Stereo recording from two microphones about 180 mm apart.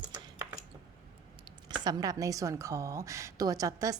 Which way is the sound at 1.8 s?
20° right (ahead or behind).